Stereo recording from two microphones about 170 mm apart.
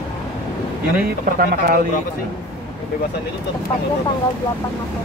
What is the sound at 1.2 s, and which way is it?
Speech, 60° right (ahead or behind).